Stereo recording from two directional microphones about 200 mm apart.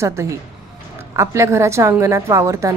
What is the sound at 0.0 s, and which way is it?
A woman's voice, 15° right (ahead or behind).